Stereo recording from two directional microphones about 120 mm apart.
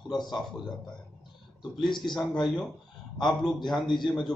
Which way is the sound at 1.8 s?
40° left (ahead or behind).